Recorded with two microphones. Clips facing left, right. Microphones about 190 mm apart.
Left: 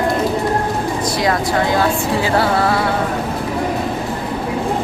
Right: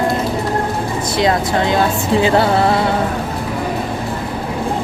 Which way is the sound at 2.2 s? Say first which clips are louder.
Right 3 dB; 25° right (ahead or behind).